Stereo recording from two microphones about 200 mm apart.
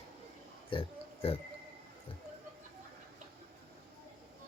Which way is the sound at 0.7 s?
25° left (ahead or behind).